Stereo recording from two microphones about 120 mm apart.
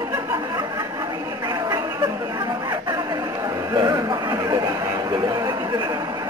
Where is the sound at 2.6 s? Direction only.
40° right (ahead or behind).